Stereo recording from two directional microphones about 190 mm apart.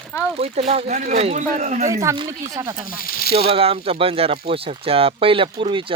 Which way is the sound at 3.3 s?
30° right (ahead or behind).